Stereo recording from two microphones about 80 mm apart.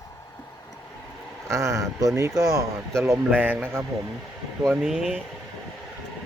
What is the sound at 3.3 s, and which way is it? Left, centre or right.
Speech, right.